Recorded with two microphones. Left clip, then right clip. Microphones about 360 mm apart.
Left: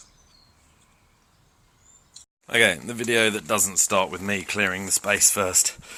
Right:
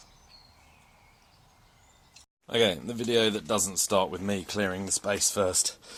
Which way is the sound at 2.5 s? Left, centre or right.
Centre.